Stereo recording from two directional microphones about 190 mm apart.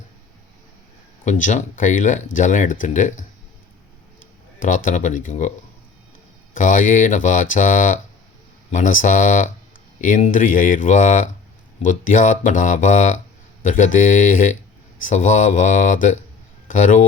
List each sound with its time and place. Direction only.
1.2 s speech: 40° left (ahead or behind)
4.6 s speech: 45° left (ahead or behind)